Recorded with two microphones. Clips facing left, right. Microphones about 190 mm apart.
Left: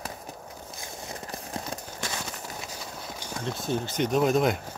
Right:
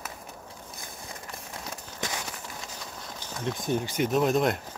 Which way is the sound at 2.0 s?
20° right (ahead or behind).